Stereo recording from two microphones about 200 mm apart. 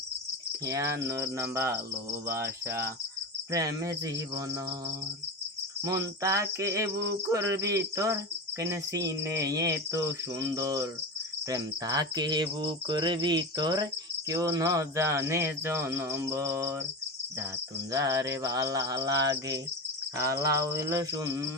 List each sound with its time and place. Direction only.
0.6 s cricket: 15° right (ahead or behind)
5.8 s cricket: 15° right (ahead or behind)
11.4 s insect: 20° right (ahead or behind)
14.3 s cricket: 15° right (ahead or behind)
17.9 s cricket: 15° right (ahead or behind)